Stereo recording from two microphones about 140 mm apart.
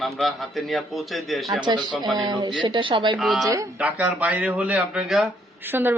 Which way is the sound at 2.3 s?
30° right (ahead or behind).